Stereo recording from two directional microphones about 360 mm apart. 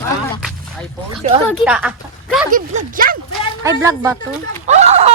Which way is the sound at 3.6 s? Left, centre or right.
Centre.